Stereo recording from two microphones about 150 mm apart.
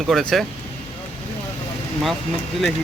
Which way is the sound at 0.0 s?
Centre (ahead or behind).